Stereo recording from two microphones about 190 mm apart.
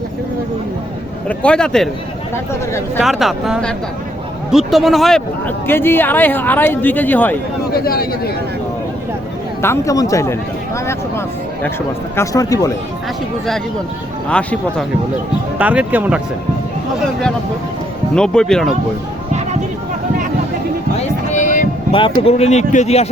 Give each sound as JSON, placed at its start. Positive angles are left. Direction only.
{"t": 1.3, "sound": "speech", "side_deg": 5}
{"t": 2.3, "sound": "speech", "side_deg": 15}
{"t": 3.0, "sound": "speech", "side_deg": 0}
{"t": 7.7, "sound": "speech", "side_deg": 55}
{"t": 9.6, "sound": "speech", "side_deg": 15}
{"t": 12.1, "sound": "speech", "side_deg": 15}
{"t": 14.3, "sound": "speech", "side_deg": 5}
{"t": 15.5, "sound": "speech", "side_deg": -10}
{"t": 18.1, "sound": "speech", "side_deg": 5}
{"t": 21.3, "sound": "music", "side_deg": 40}
{"t": 22.2, "sound": "speech", "side_deg": 35}